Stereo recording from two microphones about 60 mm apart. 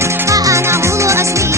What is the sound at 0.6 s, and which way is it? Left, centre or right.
Music, right.